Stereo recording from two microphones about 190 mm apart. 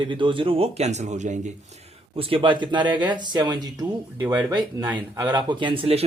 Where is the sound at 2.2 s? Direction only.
30° right (ahead or behind).